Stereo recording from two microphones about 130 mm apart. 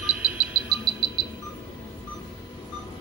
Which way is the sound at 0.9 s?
40° left (ahead or behind).